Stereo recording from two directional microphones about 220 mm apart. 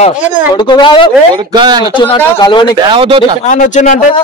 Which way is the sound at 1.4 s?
20° right (ahead or behind).